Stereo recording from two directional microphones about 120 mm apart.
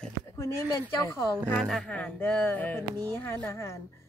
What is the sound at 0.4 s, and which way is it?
Speech, 25° left (ahead or behind).